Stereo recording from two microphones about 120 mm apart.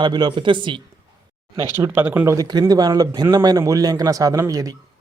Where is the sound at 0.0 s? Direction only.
40° right (ahead or behind).